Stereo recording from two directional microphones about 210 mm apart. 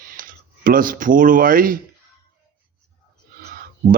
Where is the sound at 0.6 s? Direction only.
40° right (ahead or behind).